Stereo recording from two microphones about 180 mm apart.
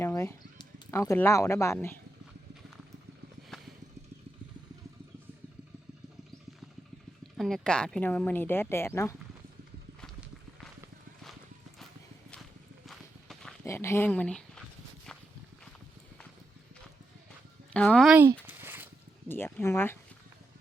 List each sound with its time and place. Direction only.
0.0 s speech: 15° left (ahead or behind)
3.5 s clip-clop: centre (ahead or behind)
7.3 s speech: centre (ahead or behind)
10.0 s clip-clop: centre (ahead or behind)
12.8 s clip-clop: centre (ahead or behind)
13.7 s speech: 15° left (ahead or behind)
17.7 s speech: 5° left (ahead or behind)
18.1 s speech: 10° right (ahead or behind)
18.4 s a sound: 10° right (ahead or behind)
19.3 s speech: 10° left (ahead or behind)